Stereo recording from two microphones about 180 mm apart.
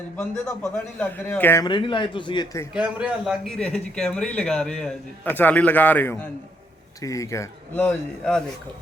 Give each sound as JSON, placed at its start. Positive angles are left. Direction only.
{"t": 0.2, "sound": "a man's voice", "side_deg": 10}
{"t": 1.6, "sound": "a man's voice", "side_deg": 25}
{"t": 2.7, "sound": "a man's voice", "side_deg": -5}